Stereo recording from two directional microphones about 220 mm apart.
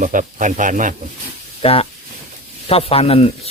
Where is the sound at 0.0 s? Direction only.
35° right (ahead or behind).